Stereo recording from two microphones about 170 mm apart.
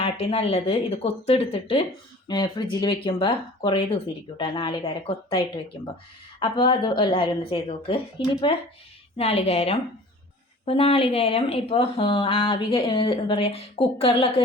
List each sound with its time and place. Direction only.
0.0 s speech: 35° left (ahead or behind)
2.2 s speech: 25° left (ahead or behind)
6.4 s speech: 30° left (ahead or behind)